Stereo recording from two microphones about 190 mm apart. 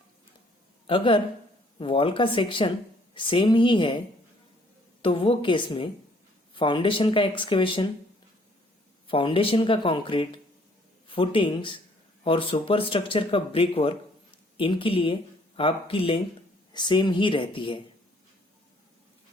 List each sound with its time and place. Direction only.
0.9 s speech: 25° left (ahead or behind)
5.0 s speech: 30° left (ahead or behind)
9.0 s speech: 30° left (ahead or behind)